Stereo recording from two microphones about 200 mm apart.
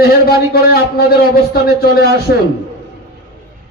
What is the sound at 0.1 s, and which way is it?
A man's voice, 50° left (ahead or behind).